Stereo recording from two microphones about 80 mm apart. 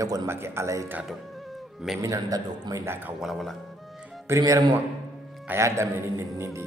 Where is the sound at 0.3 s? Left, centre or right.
Right.